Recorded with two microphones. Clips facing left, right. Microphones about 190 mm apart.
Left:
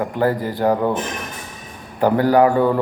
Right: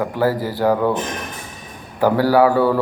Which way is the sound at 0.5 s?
20° left (ahead or behind).